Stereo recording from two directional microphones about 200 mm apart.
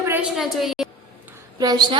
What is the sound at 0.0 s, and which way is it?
Speech, 10° right (ahead or behind).